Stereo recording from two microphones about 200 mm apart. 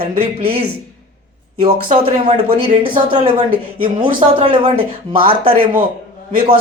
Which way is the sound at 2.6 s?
25° right (ahead or behind).